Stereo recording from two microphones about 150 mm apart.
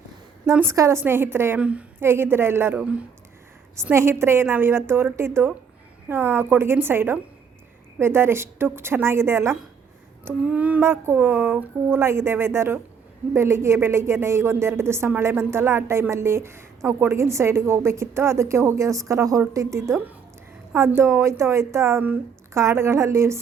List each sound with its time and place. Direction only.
0.5 s a woman's voice: 15° right (ahead or behind)